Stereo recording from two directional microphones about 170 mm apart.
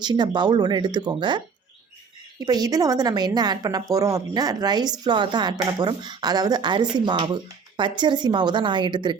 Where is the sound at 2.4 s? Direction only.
25° right (ahead or behind).